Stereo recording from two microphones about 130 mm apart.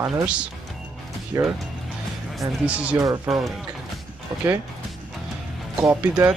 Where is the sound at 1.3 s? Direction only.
20° right (ahead or behind).